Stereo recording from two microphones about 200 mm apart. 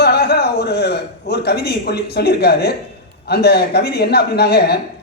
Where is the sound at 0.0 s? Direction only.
55° left (ahead or behind).